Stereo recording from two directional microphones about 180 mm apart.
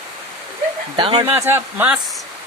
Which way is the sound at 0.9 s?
25° right (ahead or behind).